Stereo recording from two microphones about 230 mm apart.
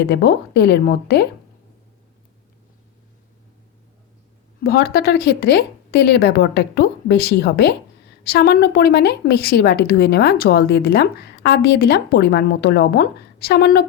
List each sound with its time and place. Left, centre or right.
0.0 s a woman's voice: left
4.6 s a woman's voice: left